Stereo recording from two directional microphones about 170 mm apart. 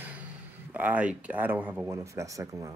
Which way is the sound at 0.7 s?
10° right (ahead or behind).